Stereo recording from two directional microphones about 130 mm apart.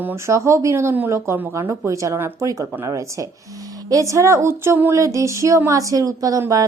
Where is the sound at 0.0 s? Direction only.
20° right (ahead or behind).